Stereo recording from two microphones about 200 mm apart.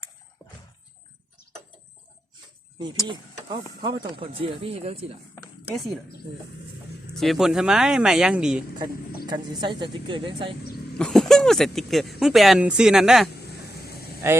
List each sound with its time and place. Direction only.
2.7 s speech: 20° right (ahead or behind)
7.1 s speech: centre (ahead or behind)
9.2 s speech: 20° right (ahead or behind)
10.9 s speech: 5° left (ahead or behind)
14.2 s speech: 10° right (ahead or behind)